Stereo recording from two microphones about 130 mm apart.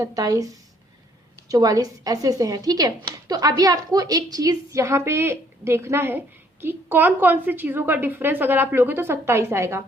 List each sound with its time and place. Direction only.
0.0 s speech: 30° right (ahead or behind)
1.5 s speech: 25° right (ahead or behind)